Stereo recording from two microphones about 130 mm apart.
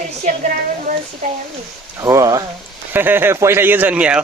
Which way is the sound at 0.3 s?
80° right.